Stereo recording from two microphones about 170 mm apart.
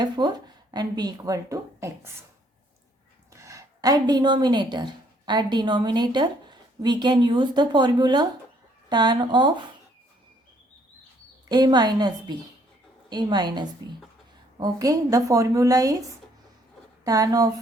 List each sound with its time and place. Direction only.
0.0 s speech: 25° right (ahead or behind)
3.3 s a woman's voice: 20° right (ahead or behind)
11.4 s a woman's voice: 25° right (ahead or behind)